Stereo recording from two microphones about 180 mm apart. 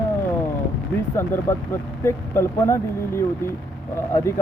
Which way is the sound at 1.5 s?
15° left (ahead or behind).